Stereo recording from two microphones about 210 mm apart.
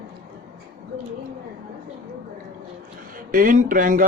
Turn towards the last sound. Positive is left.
turn(degrees=-40)  # may be behind; listen again after turning